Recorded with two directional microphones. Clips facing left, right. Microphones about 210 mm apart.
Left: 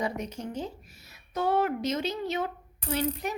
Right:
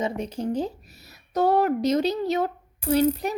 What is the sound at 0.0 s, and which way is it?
A woman's voice, 30° right (ahead or behind).